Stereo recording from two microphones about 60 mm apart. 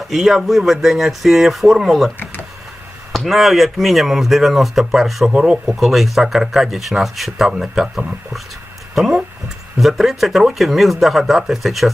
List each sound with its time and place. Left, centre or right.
0.1 s speech: centre
5.3 s speech: centre
5.6 s speech: centre